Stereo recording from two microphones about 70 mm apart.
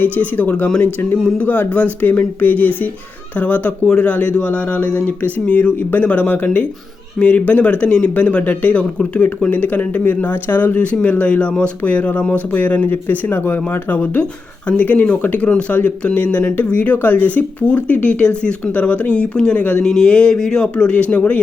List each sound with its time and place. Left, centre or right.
0.0 s speech: left